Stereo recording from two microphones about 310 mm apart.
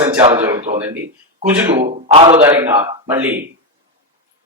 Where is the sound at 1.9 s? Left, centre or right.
Right.